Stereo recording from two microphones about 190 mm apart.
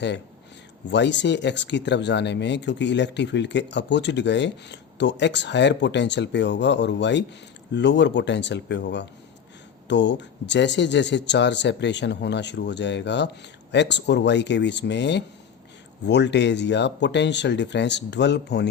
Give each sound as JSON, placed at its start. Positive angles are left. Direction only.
{"t": 0.9, "sound": "speech", "side_deg": 65}